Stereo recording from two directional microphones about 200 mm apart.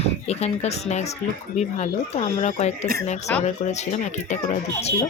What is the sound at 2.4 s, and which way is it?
Speech, 35° left (ahead or behind).